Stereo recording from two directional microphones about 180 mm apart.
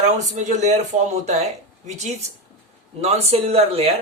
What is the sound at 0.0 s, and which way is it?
Speech, 40° right (ahead or behind).